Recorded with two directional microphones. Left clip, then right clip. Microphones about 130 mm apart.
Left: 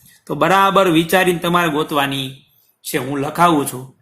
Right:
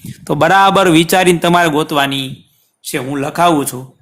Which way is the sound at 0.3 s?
90° right.